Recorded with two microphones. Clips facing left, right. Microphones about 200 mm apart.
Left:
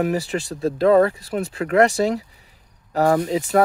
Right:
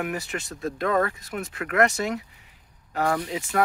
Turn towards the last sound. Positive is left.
turn(degrees=35)  # may be behind; listen again after turning